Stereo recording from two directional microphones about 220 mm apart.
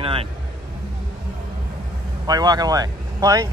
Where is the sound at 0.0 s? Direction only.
25° right (ahead or behind).